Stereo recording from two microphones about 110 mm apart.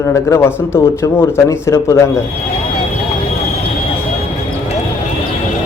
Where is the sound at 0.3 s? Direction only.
25° left (ahead or behind).